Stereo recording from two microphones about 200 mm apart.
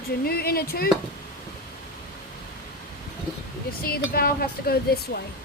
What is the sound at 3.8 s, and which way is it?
Speech, 50° left (ahead or behind).